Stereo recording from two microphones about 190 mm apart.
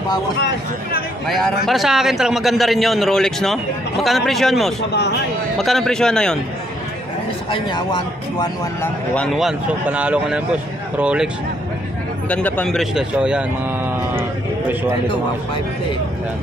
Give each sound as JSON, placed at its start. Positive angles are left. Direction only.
{"t": 1.2, "sound": "a man's voice", "side_deg": 0}
{"t": 7.5, "sound": "a man's voice", "side_deg": 25}
{"t": 8.8, "sound": "a man's voice", "side_deg": 5}
{"t": 12.3, "sound": "a man's voice", "side_deg": 5}
{"t": 14.7, "sound": "a man's voice", "side_deg": -10}